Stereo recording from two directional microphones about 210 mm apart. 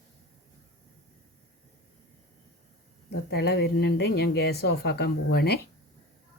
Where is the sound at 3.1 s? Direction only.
50° left (ahead or behind).